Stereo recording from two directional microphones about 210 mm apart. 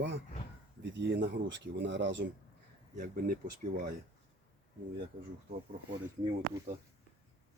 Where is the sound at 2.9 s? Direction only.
40° right (ahead or behind).